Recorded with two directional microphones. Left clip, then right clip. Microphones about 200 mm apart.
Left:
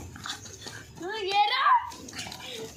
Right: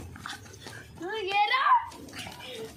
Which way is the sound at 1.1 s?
5° left (ahead or behind).